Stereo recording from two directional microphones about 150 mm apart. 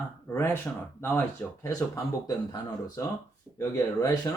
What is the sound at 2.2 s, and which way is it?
Speech, 25° left (ahead or behind).